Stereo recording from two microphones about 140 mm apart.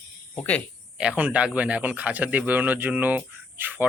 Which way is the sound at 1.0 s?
10° right (ahead or behind).